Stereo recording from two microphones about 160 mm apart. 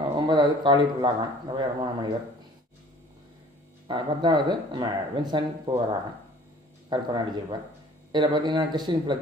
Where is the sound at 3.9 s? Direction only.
25° right (ahead or behind).